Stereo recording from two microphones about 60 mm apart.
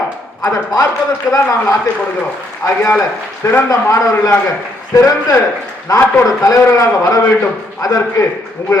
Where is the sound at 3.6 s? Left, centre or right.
Left.